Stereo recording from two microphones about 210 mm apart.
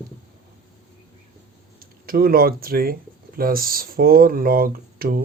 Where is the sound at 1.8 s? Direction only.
45° right (ahead or behind).